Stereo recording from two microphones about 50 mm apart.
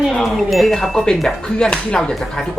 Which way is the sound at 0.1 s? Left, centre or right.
Centre.